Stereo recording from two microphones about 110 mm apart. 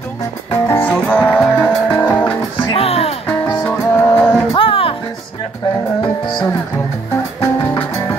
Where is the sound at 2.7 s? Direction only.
65° left (ahead or behind).